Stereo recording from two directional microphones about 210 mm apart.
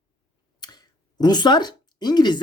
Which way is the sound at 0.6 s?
20° left (ahead or behind).